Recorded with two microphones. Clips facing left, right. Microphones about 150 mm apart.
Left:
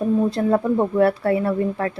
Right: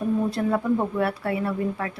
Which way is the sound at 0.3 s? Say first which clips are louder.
Left 4 dB; 25° left (ahead or behind).